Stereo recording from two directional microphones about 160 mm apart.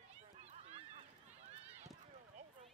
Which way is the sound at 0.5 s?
40° right (ahead or behind).